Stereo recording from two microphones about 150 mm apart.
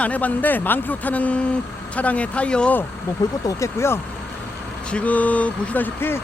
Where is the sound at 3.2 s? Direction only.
20° left (ahead or behind).